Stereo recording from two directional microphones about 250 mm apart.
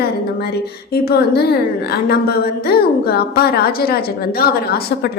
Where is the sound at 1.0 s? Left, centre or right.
Left.